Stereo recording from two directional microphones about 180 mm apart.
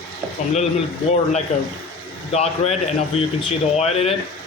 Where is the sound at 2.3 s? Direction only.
35° left (ahead or behind).